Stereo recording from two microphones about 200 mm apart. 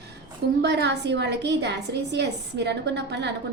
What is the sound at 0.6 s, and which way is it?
A woman's voice, 55° right (ahead or behind).